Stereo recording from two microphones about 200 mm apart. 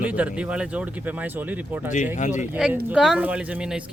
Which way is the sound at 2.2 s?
35° left (ahead or behind).